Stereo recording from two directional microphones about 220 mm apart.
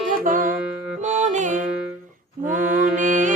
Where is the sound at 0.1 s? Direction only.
35° right (ahead or behind).